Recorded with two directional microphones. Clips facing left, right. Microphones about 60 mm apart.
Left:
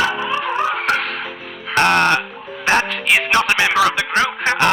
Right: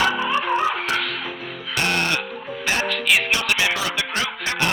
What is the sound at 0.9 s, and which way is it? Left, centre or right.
Music, left.